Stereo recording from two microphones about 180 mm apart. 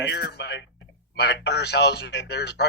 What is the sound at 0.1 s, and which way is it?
Speech, 70° left (ahead or behind).